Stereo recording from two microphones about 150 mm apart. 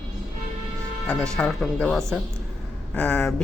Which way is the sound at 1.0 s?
5° left (ahead or behind).